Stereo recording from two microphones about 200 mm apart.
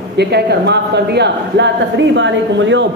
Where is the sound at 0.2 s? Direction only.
55° right (ahead or behind).